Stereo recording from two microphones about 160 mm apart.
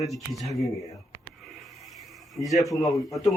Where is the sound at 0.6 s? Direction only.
20° left (ahead or behind).